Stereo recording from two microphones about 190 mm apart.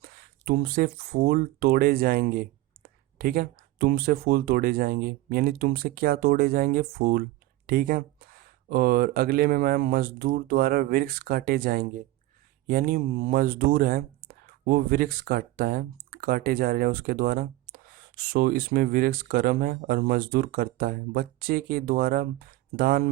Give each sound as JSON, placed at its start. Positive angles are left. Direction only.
{"t": 0.0, "sound": "speech", "side_deg": -50}